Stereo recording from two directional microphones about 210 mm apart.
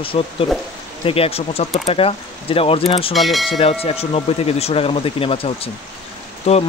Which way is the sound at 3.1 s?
Centre (ahead or behind).